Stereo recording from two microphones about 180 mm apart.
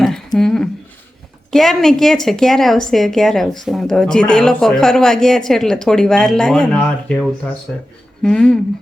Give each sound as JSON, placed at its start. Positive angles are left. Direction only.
{"t": 0.3, "sound": "a woman's voice", "side_deg": 5}